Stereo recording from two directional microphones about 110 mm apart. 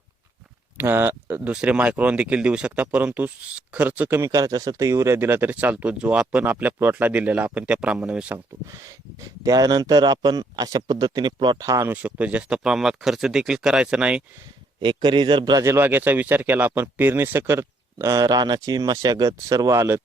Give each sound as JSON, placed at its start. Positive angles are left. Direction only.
{"t": 0.8, "sound": "speech", "side_deg": -20}
{"t": 4.2, "sound": "speech", "side_deg": -30}
{"t": 9.4, "sound": "a man's voice", "side_deg": -35}
{"t": 11.6, "sound": "speech", "side_deg": -25}
{"t": 12.0, "sound": "speech", "side_deg": -10}
{"t": 14.8, "sound": "a man's voice", "side_deg": -45}
{"t": 15.5, "sound": "speech", "side_deg": -25}